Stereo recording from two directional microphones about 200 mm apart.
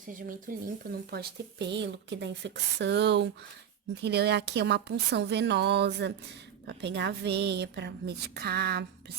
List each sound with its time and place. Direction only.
0.1 s speech: 45° right (ahead or behind)